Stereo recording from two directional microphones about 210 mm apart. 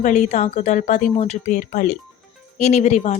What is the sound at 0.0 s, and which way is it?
A woman's voice, 35° left (ahead or behind).